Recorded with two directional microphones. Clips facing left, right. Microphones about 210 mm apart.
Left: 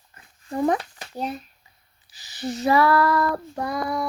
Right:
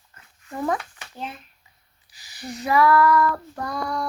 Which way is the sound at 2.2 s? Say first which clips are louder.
Left 6 dB; 25° left (ahead or behind).